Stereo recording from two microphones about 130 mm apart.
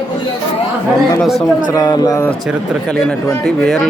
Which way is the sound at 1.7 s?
30° left (ahead or behind).